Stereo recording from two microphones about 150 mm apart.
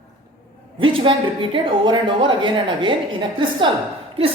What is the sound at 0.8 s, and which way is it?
A woman's voice, 35° right (ahead or behind).